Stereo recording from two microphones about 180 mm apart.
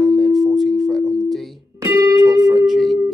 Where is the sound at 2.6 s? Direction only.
Centre (ahead or behind).